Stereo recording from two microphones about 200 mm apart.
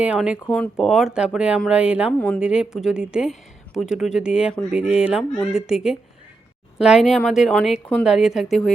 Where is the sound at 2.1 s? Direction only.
5° left (ahead or behind).